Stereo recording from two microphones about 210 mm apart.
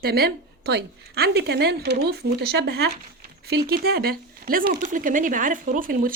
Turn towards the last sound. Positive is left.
turn(degrees=-40)  # may be behind; listen again after turning